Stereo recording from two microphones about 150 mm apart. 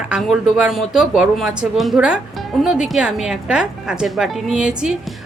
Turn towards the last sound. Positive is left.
turn(degrees=0)  # may be behind; listen again after turning